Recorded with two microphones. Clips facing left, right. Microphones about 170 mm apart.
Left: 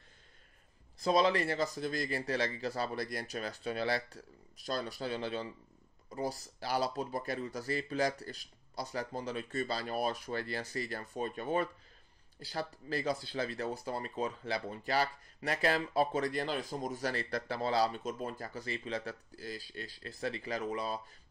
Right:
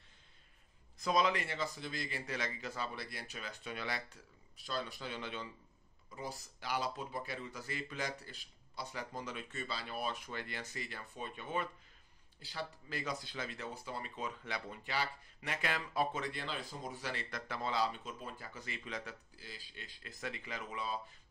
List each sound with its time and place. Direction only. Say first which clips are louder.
0.9 s speech: left 4 dB; 30° left (ahead or behind)